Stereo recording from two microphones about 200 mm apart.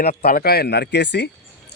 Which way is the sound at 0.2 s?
50° left (ahead or behind).